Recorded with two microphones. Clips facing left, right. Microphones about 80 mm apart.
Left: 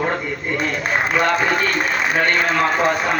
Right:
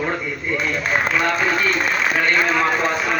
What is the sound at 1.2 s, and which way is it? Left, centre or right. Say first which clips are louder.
Speech: left 1 dB; left.